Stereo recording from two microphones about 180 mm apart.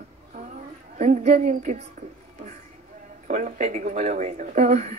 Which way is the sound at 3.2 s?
45° right (ahead or behind).